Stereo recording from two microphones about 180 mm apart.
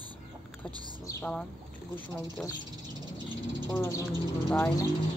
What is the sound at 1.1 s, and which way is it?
Speech, 10° left (ahead or behind).